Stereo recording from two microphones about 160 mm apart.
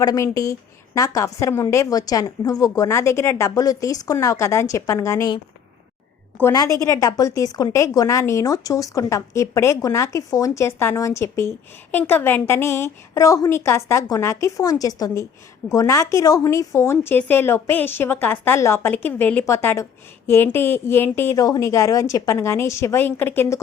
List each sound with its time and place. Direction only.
0.0 s speech: 20° left (ahead or behind)
6.3 s speech: 20° left (ahead or behind)